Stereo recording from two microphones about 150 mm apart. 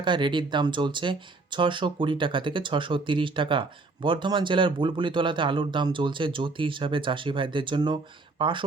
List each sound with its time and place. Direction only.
0.0 s speech: 30° right (ahead or behind)